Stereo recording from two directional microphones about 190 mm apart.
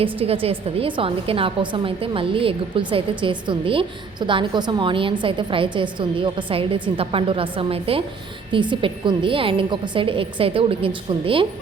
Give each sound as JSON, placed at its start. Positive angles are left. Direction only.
{"t": 0.0, "sound": "a woman's voice", "side_deg": -30}